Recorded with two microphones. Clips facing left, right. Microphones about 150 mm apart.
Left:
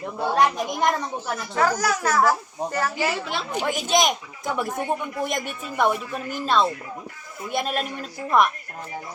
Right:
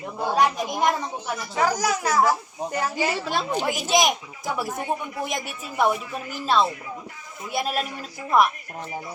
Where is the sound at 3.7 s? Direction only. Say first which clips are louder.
Left 2 dB; 5° right (ahead or behind).